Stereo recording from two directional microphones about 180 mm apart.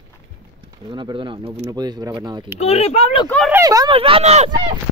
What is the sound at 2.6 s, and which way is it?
Speech, 35° left (ahead or behind).